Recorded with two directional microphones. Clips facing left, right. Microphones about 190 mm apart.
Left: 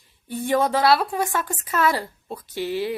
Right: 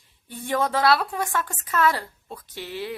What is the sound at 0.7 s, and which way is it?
A woman's voice, 5° left (ahead or behind).